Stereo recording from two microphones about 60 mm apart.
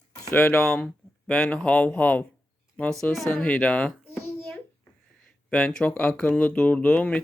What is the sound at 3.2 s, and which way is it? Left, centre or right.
Speech, left.